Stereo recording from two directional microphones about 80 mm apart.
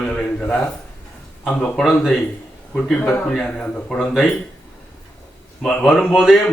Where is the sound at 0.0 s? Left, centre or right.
Centre.